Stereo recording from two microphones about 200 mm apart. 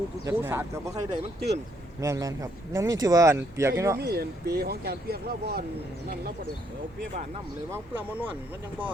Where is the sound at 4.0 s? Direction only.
50° right (ahead or behind).